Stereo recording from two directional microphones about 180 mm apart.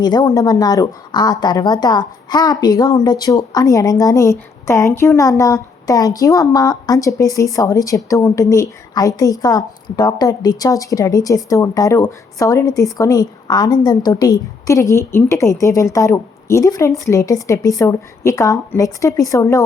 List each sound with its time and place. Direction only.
0.0 s a woman's voice: 20° left (ahead or behind)